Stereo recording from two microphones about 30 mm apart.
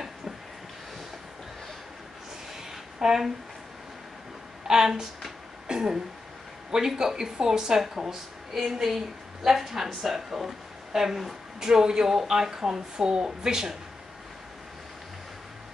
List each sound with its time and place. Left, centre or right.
3.0 s speech: centre
4.6 s a woman's voice: centre
5.7 s a sound: right
7.0 s a woman's voice: centre
13.5 s a woman's voice: centre